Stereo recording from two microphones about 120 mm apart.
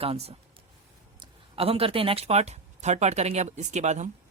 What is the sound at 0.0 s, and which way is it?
Speech, 55° right (ahead or behind).